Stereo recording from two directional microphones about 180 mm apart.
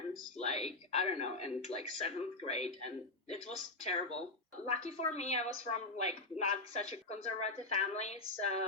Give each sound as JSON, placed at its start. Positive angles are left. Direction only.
{"t": 0.3, "sound": "a woman's voice", "side_deg": 35}